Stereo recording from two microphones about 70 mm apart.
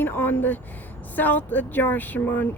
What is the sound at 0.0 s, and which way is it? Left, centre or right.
A woman's voice, left.